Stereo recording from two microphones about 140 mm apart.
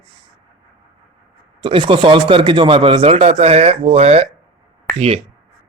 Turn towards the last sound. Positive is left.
turn(degrees=-45)  # may be behind; listen again after turning